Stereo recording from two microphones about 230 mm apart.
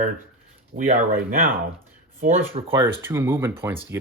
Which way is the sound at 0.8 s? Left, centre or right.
Right.